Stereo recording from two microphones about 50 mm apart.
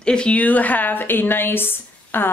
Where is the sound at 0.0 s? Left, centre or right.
Centre.